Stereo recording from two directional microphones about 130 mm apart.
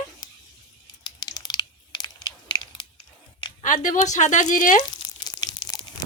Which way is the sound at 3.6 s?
80° left.